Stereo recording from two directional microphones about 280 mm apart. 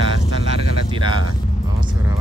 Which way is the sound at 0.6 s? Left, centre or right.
Right.